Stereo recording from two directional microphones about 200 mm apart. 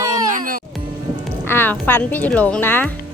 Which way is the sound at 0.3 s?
45° right (ahead or behind).